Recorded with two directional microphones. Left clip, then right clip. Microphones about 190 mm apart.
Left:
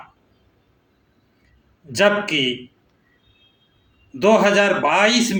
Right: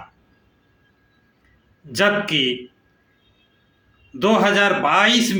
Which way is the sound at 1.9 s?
15° right (ahead or behind).